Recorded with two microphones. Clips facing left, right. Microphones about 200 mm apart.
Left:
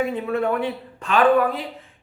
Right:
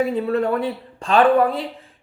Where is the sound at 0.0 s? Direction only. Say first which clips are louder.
Right 3 dB; 35° right (ahead or behind).